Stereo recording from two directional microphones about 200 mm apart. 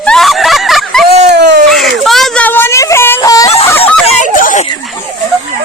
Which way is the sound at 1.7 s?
Centre (ahead or behind).